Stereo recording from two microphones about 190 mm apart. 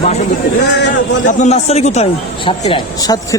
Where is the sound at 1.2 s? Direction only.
35° left (ahead or behind).